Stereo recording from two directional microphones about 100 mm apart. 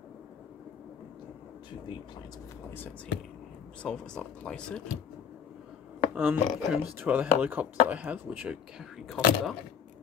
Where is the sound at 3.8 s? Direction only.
10° left (ahead or behind).